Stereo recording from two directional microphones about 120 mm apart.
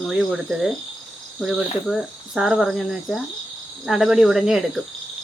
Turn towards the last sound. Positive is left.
turn(degrees=-5)  # may be behind; listen again after turning